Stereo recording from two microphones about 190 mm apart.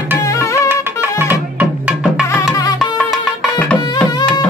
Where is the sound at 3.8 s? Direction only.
20° left (ahead or behind).